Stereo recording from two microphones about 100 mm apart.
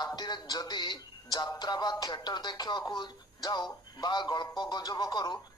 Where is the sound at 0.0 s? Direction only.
45° left (ahead or behind).